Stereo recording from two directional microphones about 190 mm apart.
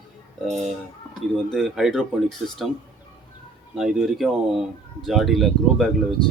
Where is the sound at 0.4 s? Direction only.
35° right (ahead or behind).